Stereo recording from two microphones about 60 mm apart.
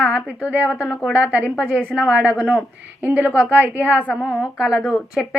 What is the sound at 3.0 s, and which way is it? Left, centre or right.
A woman's voice, right.